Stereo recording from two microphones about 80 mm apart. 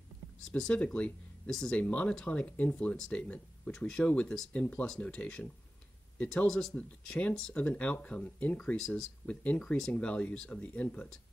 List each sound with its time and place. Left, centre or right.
0.5 s speech: centre